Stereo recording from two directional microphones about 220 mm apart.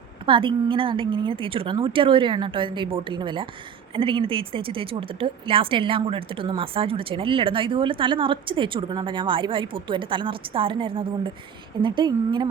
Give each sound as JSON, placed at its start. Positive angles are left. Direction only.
{"t": 0.3, "sound": "speech", "side_deg": -25}